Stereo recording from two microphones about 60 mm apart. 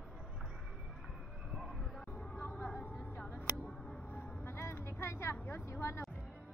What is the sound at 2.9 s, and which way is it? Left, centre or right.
Music, left.